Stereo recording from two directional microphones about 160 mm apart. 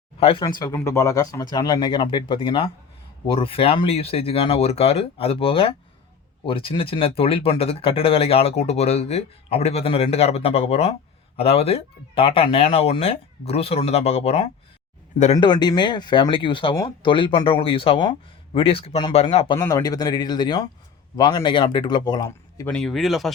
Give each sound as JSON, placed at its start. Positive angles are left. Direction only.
{"t": 0.2, "sound": "speech", "side_deg": 30}
{"t": 15.4, "sound": "speech", "side_deg": 25}
{"t": 19.5, "sound": "speech", "side_deg": 20}
{"t": 22.3, "sound": "speech", "side_deg": 15}
{"t": 22.7, "sound": "speech", "side_deg": 0}